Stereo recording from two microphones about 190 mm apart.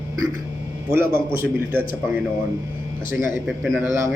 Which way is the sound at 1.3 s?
10° right (ahead or behind).